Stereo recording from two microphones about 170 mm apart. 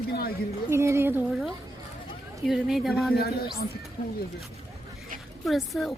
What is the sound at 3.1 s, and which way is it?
Speech, 65° left (ahead or behind).